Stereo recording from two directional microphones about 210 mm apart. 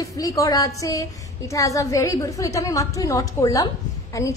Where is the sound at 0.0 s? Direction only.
15° left (ahead or behind).